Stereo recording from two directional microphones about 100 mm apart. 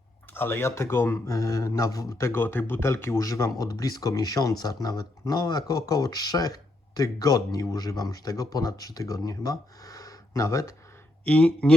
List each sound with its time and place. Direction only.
0.3 s speech: 20° left (ahead or behind)
1.3 s speech: 35° left (ahead or behind)
11.3 s speech: 15° left (ahead or behind)